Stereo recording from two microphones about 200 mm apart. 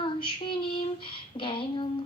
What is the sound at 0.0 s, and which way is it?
Female singing, 25° left (ahead or behind).